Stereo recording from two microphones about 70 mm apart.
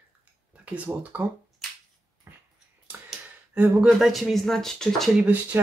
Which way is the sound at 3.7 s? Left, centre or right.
Centre.